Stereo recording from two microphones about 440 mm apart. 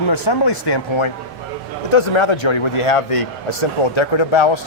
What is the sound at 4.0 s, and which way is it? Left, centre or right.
Speech, left.